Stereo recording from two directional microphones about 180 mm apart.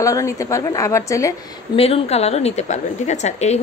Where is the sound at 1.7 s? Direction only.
35° left (ahead or behind).